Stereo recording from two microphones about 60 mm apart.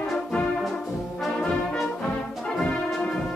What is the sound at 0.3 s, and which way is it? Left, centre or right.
Brass instrument, centre.